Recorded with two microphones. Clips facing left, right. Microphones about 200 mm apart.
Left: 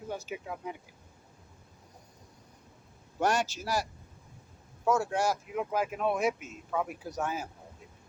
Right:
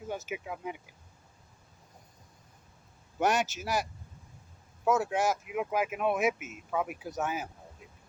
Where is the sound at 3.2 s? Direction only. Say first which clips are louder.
Right 1 dB; 20° right (ahead or behind).